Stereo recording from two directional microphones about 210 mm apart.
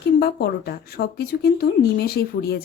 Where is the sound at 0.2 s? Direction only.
50° left (ahead or behind).